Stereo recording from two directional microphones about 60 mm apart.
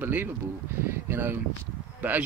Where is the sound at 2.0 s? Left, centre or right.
Right.